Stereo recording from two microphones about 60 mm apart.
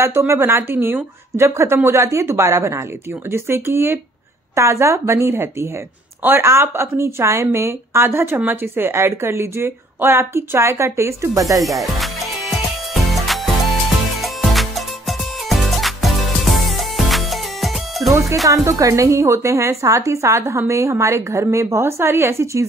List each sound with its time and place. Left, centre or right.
0.0 s a woman's voice: right
4.6 s a woman's voice: right
11.3 s speech: right
11.8 s music: centre
18.5 s a woman's voice: right